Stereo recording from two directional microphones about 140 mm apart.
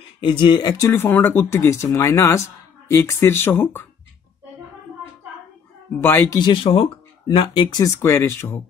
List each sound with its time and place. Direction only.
0.2 s speech: 35° left (ahead or behind); by 3.8 s 15° left (ahead or behind)
6.0 s speech: 15° left (ahead or behind)
6.4 s speech: 35° left (ahead or behind)
8.0 s speech: 15° left (ahead or behind)